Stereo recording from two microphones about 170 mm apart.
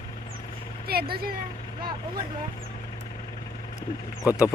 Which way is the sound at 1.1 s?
60° right (ahead or behind).